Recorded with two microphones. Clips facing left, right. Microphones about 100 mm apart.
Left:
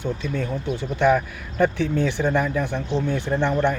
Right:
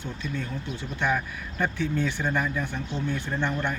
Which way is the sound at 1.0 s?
65° left (ahead or behind).